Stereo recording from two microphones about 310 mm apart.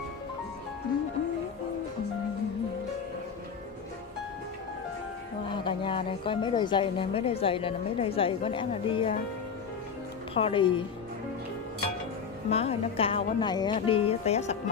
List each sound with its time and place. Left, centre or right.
5.5 s a woman's voice: centre
10.3 s a woman's voice: centre
12.4 s a woman's voice: centre